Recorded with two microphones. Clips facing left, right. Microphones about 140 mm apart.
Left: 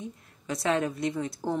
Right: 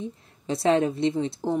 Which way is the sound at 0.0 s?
30° right (ahead or behind).